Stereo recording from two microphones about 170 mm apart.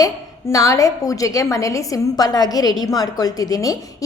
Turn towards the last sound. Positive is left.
turn(degrees=20)  # may be behind; listen again after turning